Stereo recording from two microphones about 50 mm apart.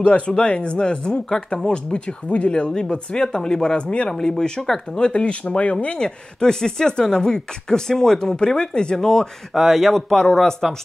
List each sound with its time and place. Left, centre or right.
0.4 s speech: left
4.1 s speech: centre
5.0 s speech: left
9.5 s a man's voice: centre
10.0 s speech: centre